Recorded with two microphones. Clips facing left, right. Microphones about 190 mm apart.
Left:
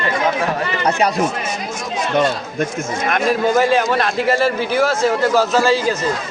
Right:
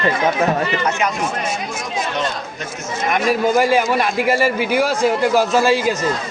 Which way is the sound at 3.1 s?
10° right (ahead or behind).